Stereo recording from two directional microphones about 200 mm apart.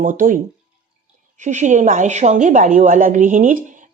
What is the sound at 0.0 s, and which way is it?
A woman's voice, 40° right (ahead or behind).